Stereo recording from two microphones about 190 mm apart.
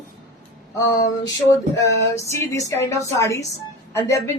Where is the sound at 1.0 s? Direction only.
20° left (ahead or behind).